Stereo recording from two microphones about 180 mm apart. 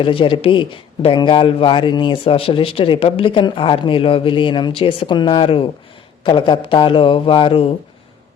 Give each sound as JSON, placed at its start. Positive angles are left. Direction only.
{"t": 0.0, "sound": "speech", "side_deg": 30}